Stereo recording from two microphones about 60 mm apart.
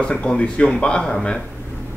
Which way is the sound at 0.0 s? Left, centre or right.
Centre.